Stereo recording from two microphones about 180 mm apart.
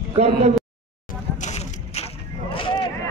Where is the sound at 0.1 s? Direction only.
35° right (ahead or behind).